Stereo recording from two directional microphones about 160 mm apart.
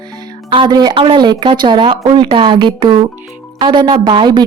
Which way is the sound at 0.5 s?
30° right (ahead or behind).